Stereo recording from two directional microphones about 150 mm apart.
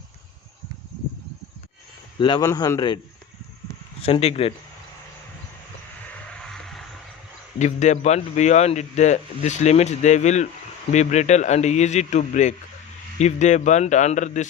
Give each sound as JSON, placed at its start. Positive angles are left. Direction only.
{"t": 2.1, "sound": "a man's voice", "side_deg": 30}
{"t": 4.0, "sound": "speech", "side_deg": 40}
{"t": 6.4, "sound": "a sound", "side_deg": 0}
{"t": 7.6, "sound": "speech", "side_deg": 50}